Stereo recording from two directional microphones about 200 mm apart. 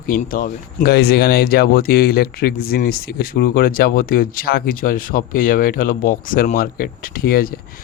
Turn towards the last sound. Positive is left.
turn(degrees=45)  # may be behind; listen again after turning